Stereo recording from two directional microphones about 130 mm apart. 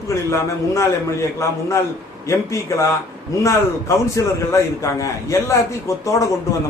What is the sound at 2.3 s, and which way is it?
Speech, 20° left (ahead or behind).